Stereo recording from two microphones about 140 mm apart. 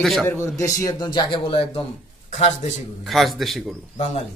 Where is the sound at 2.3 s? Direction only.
55° left (ahead or behind).